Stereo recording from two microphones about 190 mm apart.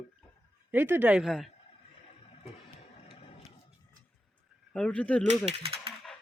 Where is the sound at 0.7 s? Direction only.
10° right (ahead or behind).